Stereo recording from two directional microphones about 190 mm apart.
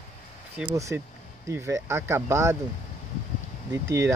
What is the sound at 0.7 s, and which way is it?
Speech, 15° right (ahead or behind).